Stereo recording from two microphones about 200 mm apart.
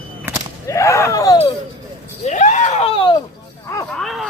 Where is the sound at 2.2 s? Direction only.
35° left (ahead or behind).